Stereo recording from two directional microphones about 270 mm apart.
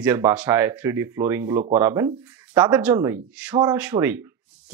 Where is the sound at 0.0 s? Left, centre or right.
Centre.